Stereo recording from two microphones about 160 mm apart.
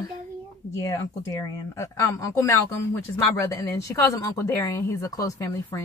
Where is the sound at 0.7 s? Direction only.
20° left (ahead or behind).